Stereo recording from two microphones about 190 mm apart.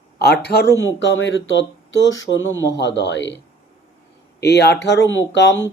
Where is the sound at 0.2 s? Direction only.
55° left (ahead or behind).